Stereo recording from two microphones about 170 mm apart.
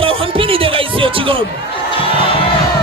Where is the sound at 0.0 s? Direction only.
30° right (ahead or behind).